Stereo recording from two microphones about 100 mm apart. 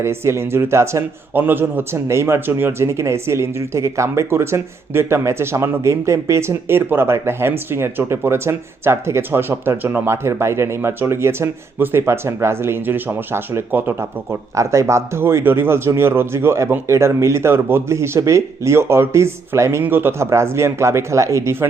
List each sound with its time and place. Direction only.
0.0 s a man's voice: 25° right (ahead or behind)